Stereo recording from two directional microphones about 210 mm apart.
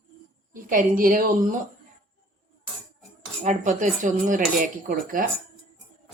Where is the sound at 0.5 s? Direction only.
40° right (ahead or behind).